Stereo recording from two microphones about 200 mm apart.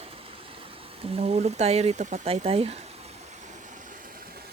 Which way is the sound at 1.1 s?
30° right (ahead or behind).